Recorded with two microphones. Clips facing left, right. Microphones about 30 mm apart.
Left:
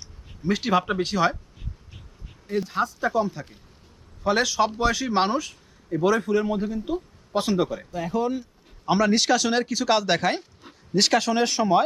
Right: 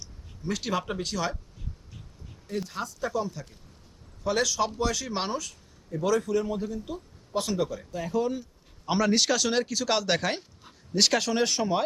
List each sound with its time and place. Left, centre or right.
0.0 s a sound: left
2.5 s speech: centre
7.9 s speech: centre